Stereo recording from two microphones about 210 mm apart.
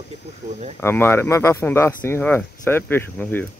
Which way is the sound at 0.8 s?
10° left (ahead or behind).